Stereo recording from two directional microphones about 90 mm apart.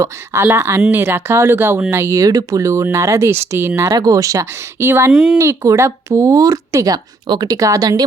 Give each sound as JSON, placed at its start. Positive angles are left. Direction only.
{"t": 0.4, "sound": "speech", "side_deg": -30}
{"t": 3.8, "sound": "speech", "side_deg": -40}
{"t": 5.1, "sound": "speech", "side_deg": -10}
{"t": 5.4, "sound": "speech", "side_deg": -35}